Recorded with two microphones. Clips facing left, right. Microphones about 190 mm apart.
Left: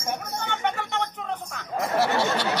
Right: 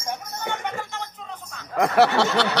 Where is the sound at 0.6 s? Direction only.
70° left (ahead or behind).